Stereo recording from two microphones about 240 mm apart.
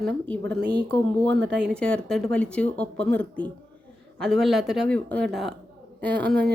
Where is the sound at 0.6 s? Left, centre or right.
Right.